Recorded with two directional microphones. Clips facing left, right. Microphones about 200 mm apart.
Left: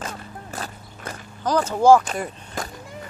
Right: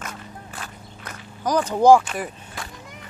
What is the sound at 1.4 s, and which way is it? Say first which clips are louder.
Speech: right 1 dB; 15° right (ahead or behind).